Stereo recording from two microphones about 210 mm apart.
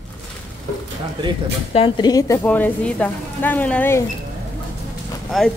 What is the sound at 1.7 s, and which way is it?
A woman's voice, 25° left (ahead or behind).